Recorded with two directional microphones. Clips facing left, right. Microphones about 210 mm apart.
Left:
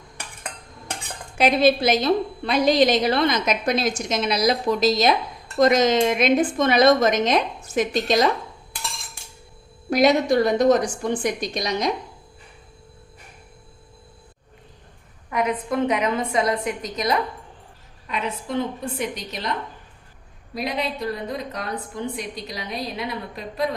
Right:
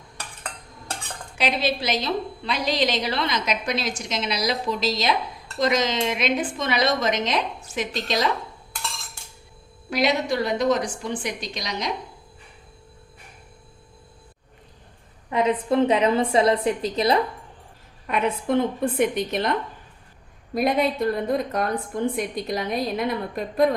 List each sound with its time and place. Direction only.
0.2 s cutlery: 15° left (ahead or behind)
1.4 s a woman's voice: 50° left (ahead or behind)
9.9 s a woman's voice: 45° left (ahead or behind)
15.3 s a woman's voice: 25° right (ahead or behind)
18.0 s a woman's voice: 55° right (ahead or behind)